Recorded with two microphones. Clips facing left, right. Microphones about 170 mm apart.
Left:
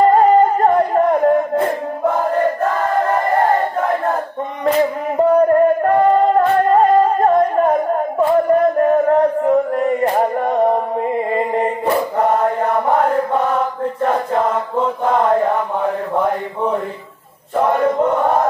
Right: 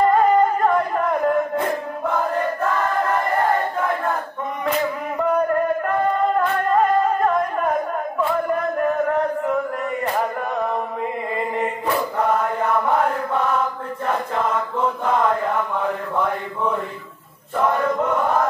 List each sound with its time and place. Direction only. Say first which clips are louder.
0.0 s music: left 5 dB; 40° left (ahead or behind)
4.6 s music: left 8 dB; 40° left (ahead or behind)